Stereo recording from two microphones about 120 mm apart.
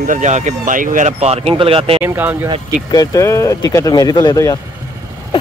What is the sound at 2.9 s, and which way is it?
Speech, 30° left (ahead or behind).